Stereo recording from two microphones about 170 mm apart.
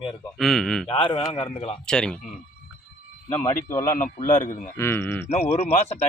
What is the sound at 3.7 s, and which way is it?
Speech, 15° left (ahead or behind).